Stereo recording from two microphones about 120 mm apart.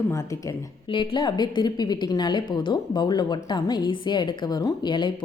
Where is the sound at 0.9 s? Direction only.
45° left (ahead or behind).